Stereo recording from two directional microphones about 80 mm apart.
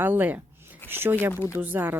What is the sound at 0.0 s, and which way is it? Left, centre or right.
Speech, right.